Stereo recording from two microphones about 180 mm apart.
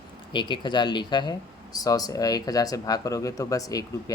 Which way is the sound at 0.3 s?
25° left (ahead or behind).